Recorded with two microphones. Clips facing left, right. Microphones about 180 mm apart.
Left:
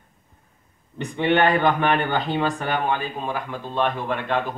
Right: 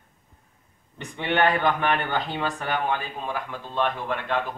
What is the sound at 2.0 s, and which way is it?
A man's voice, 25° left (ahead or behind).